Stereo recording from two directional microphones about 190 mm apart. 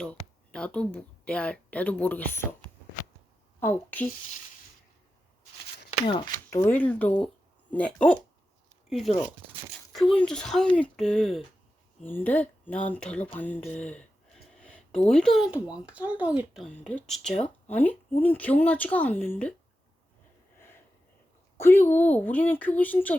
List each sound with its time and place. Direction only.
0.0 s a woman's voice: 5° left (ahead or behind)
3.6 s a woman's voice: 10° left (ahead or behind)
6.1 s speech: 25° left (ahead or behind)
6.5 s a woman's voice: 10° left (ahead or behind); by 16.6 s 5° right (ahead or behind)
16.6 s a woman's voice: 5° left (ahead or behind)
21.6 s a woman's voice: 10° left (ahead or behind)